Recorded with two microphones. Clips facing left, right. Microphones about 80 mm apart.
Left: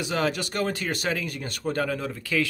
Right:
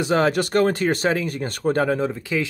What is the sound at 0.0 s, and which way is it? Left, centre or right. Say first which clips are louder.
Speech: right 7 dB; right.